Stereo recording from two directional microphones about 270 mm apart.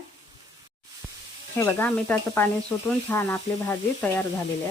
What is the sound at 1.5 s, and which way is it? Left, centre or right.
Speech, centre.